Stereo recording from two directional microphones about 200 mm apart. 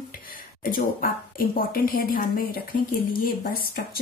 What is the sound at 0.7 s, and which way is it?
Speech, 45° left (ahead or behind).